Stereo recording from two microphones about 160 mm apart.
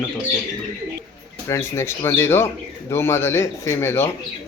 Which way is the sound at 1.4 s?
15° left (ahead or behind).